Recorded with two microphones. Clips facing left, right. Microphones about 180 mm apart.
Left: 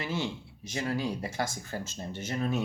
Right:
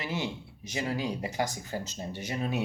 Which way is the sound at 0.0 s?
15° right (ahead or behind).